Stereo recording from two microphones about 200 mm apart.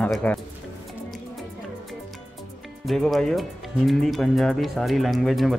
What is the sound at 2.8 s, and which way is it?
Speech, centre (ahead or behind).